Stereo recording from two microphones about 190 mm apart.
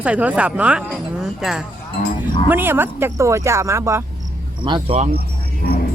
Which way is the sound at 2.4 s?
10° right (ahead or behind).